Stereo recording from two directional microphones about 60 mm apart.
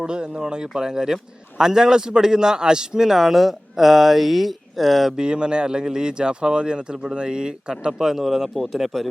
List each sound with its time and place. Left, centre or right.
0.0 s a man's voice: centre
5.1 s a man's voice: centre